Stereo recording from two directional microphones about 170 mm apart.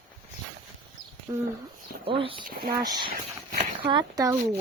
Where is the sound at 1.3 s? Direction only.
20° right (ahead or behind).